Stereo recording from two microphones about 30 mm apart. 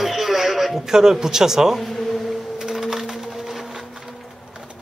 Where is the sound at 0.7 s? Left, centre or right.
Centre.